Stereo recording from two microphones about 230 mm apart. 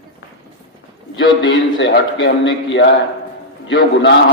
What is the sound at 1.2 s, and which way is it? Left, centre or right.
A man's voice, left.